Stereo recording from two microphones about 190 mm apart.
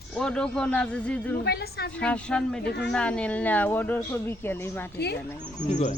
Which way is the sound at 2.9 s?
5° left (ahead or behind).